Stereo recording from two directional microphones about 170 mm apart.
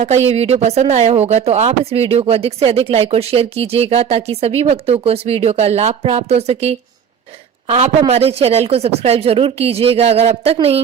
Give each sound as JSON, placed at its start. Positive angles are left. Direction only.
{"t": 0.0, "sound": "speech", "side_deg": -40}